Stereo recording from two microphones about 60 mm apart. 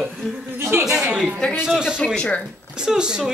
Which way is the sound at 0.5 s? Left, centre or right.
Right.